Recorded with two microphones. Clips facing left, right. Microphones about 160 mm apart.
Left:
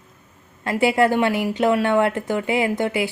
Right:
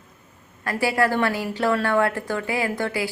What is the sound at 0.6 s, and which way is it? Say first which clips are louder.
A woman's voice: left 4 dB; 20° left (ahead or behind).